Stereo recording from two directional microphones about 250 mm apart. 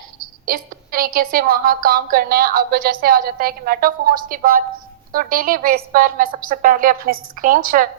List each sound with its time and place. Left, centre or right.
0.4 s a woman's voice: right